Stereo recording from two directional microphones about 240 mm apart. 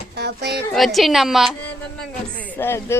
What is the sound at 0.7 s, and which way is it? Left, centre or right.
Speech, centre.